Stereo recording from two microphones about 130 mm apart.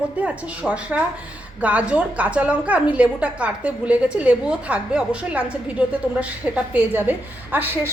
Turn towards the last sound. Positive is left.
turn(degrees=-15)  # may be behind; listen again after turning